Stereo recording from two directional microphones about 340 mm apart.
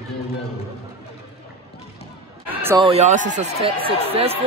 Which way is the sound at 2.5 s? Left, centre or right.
Centre.